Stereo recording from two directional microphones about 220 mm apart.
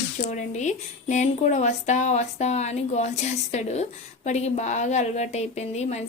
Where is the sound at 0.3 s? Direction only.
35° left (ahead or behind).